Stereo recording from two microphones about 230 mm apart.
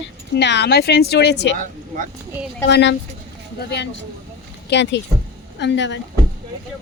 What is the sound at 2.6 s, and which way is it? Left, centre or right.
Speech, left.